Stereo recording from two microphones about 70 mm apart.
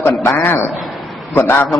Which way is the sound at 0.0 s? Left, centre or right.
Left.